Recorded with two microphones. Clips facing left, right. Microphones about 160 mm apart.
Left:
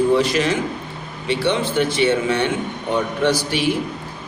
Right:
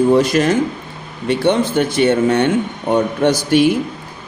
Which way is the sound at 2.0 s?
45° right (ahead or behind).